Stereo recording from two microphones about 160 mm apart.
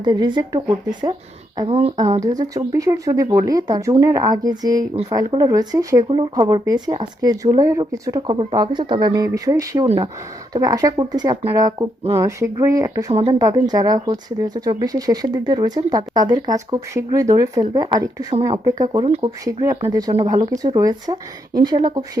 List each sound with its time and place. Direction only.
0.0 s speech: 30° right (ahead or behind)
1.6 s speech: 40° right (ahead or behind)
2.2 s speech: 20° right (ahead or behind)
8.3 s speech: 35° right (ahead or behind)